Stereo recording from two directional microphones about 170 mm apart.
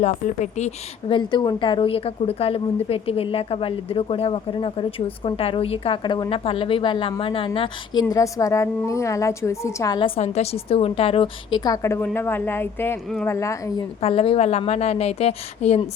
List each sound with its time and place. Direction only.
0.0 s a woman's voice: 45° left (ahead or behind)
1.1 s a woman's voice: 30° left (ahead or behind)
8.1 s a woman's voice: 20° left (ahead or behind)
10.2 s a woman's voice: 40° left (ahead or behind); by 13.8 s 20° left (ahead or behind)
14.0 s a woman's voice: 35° left (ahead or behind)